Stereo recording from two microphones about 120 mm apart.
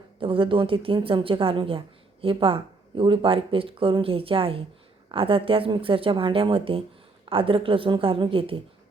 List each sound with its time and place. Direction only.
0.2 s speech: 45° right (ahead or behind)